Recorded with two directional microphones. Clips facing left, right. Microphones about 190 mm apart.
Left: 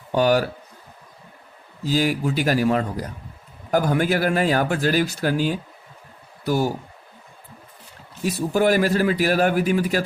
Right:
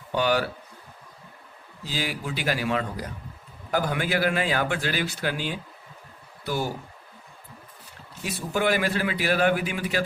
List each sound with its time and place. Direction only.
0.1 s speech: 45° left (ahead or behind)
1.8 s a man's voice: 45° left (ahead or behind)
8.2 s a man's voice: 40° left (ahead or behind)